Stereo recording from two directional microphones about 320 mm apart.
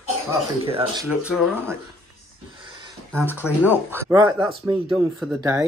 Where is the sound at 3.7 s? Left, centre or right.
Centre.